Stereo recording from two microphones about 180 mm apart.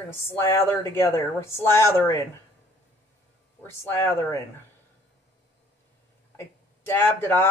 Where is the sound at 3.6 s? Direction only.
15° left (ahead or behind).